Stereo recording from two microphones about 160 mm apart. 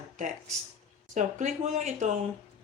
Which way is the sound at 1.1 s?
50° right (ahead or behind).